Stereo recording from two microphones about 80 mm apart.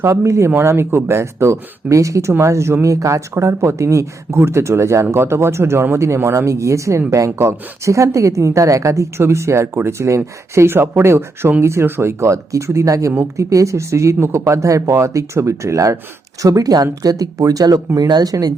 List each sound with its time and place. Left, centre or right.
0.0 s a woman's voice: right